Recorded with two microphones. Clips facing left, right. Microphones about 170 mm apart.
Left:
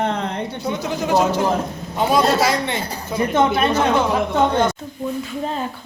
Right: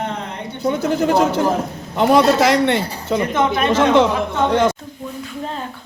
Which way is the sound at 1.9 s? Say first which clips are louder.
Right 4 dB; 70° right (ahead or behind).